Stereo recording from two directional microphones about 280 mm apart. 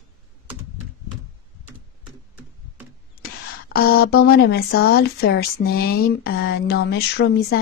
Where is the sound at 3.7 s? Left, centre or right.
Left.